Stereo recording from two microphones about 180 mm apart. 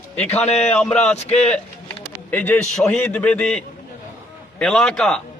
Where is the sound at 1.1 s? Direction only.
35° left (ahead or behind).